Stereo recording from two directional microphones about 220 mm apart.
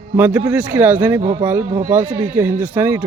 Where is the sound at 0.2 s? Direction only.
5° right (ahead or behind).